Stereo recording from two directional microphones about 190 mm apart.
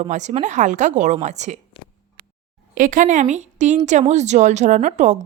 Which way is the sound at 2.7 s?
45° right (ahead or behind).